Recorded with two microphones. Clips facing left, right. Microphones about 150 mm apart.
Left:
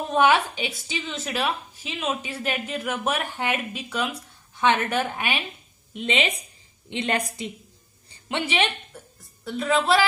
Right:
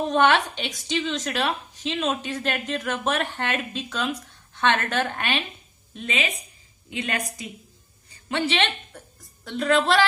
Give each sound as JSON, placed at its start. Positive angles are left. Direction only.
{"t": 0.1, "sound": "a woman's voice", "side_deg": 10}
{"t": 5.9, "sound": "speech", "side_deg": 25}
{"t": 8.3, "sound": "a woman's voice", "side_deg": 15}
{"t": 9.4, "sound": "a woman's voice", "side_deg": 5}